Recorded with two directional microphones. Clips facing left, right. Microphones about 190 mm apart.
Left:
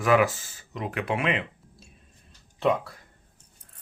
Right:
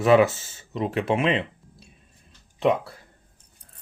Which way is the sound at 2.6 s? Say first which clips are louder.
Right 2 dB; 20° right (ahead or behind).